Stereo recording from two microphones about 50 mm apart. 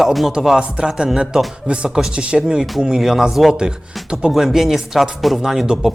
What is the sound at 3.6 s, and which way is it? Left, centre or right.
A man's voice, centre.